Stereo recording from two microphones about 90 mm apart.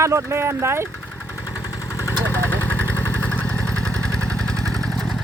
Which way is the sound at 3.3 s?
15° left (ahead or behind).